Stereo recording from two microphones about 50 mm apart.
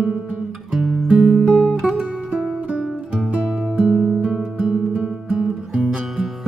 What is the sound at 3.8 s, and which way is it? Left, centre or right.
Music, centre.